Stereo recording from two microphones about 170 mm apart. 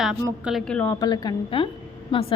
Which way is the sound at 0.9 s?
20° left (ahead or behind).